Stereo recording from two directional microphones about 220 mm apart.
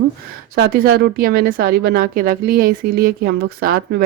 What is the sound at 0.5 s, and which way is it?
Speech, 45° right (ahead or behind).